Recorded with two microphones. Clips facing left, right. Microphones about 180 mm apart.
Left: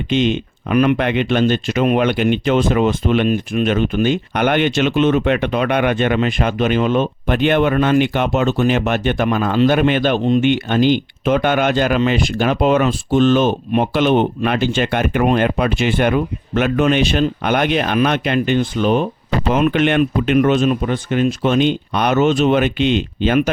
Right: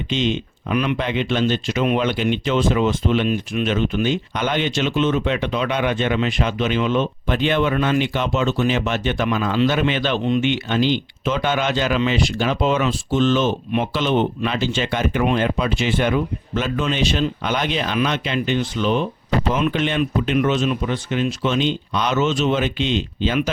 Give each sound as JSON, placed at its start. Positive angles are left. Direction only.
{"t": 0.1, "sound": "speech", "side_deg": 55}
{"t": 19.5, "sound": "speech", "side_deg": 65}